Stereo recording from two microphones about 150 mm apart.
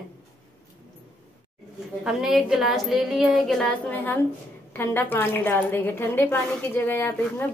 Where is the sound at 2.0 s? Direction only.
5° right (ahead or behind).